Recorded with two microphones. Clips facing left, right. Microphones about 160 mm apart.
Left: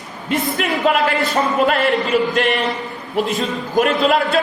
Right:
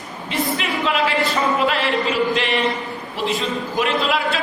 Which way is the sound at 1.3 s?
45° left (ahead or behind).